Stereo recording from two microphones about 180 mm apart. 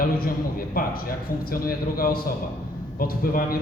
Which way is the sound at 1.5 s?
55° left (ahead or behind).